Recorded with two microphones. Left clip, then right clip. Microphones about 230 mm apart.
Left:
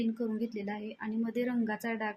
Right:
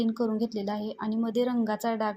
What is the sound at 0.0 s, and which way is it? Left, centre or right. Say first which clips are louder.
A woman's voice: right 6 dB; centre.